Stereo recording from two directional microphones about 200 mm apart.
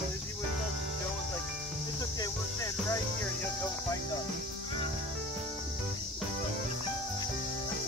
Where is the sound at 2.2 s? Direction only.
15° left (ahead or behind).